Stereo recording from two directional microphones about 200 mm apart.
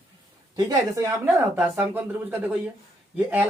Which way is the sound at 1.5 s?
5° right (ahead or behind).